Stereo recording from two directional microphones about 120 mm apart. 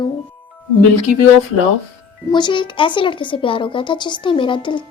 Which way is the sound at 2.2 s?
40° left (ahead or behind).